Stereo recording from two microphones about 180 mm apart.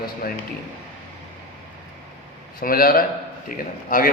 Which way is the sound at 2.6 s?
55° left (ahead or behind).